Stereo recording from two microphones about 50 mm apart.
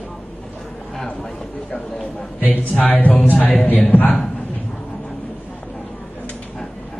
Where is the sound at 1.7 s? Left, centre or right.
Centre.